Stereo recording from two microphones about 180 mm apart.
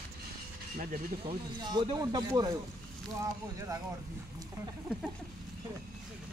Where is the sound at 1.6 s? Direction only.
25° right (ahead or behind).